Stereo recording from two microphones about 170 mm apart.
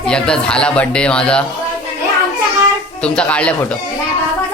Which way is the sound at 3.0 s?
5° left (ahead or behind).